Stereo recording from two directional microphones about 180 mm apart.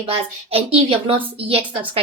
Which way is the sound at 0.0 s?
30° right (ahead or behind).